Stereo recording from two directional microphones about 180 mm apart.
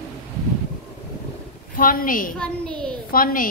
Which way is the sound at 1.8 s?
50° left (ahead or behind).